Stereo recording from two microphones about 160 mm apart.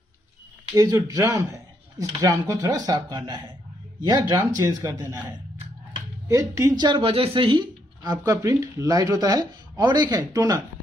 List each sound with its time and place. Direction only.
0.7 s speech: 20° right (ahead or behind)